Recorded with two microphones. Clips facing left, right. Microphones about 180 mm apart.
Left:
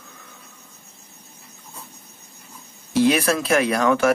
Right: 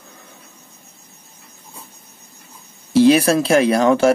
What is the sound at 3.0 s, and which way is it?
Speech, 30° right (ahead or behind).